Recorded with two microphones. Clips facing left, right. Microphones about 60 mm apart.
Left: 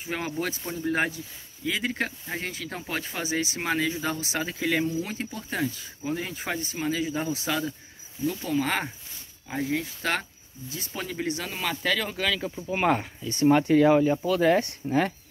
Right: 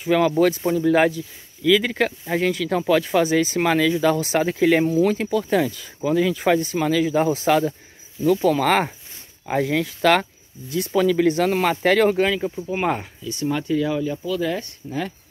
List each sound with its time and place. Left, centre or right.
0.0 s speech: right
0.7 s speech: right
4.2 s speech: right
8.5 s speech: right
9.5 s speech: right
11.2 s speech: right
12.4 s speech: centre
13.3 s speech: left